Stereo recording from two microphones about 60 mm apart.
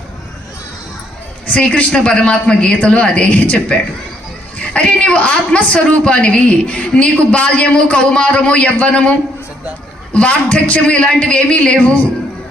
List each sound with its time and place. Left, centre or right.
1.5 s a woman's voice: left